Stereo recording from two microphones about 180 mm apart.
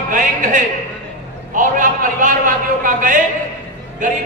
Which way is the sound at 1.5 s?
45° right (ahead or behind).